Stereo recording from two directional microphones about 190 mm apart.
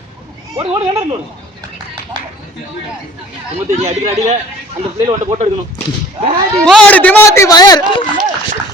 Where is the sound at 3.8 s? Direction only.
35° right (ahead or behind).